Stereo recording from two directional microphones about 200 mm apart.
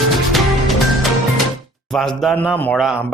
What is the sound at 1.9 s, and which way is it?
A man's voice, centre (ahead or behind).